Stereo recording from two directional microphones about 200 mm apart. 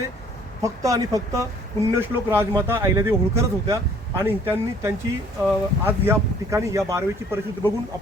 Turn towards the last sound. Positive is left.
turn(degrees=-15)  # may be behind; listen again after turning